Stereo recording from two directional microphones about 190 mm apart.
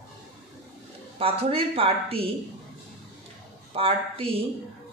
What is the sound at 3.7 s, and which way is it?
Speech, 30° right (ahead or behind).